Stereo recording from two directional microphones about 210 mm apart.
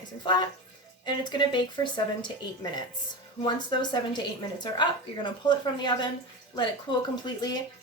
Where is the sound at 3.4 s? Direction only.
20° left (ahead or behind).